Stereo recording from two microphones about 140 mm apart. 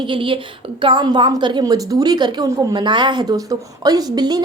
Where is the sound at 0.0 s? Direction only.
35° right (ahead or behind).